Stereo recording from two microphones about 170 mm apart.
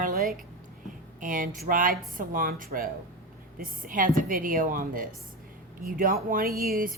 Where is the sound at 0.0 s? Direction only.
55° right (ahead or behind).